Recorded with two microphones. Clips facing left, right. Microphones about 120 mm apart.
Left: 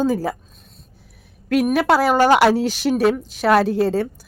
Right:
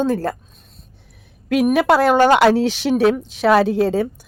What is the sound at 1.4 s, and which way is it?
Speech, centre (ahead or behind).